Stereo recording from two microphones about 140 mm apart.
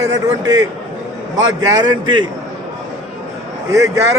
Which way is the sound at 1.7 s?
35° right (ahead or behind).